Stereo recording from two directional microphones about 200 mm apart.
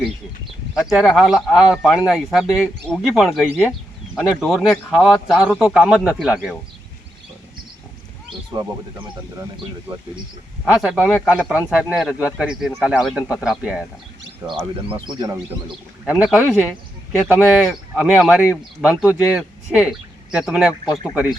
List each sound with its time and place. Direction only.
0.9 s speech: centre (ahead or behind)
8.5 s speech: 15° right (ahead or behind)
10.8 s speech: 5° right (ahead or behind)
14.6 s speech: 25° right (ahead or behind)
16.1 s speech: 5° right (ahead or behind)
20.9 s speech: 15° left (ahead or behind)